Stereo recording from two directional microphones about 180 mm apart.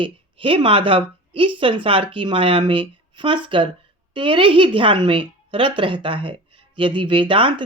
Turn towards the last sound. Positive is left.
turn(degrees=-30)  # may be behind; listen again after turning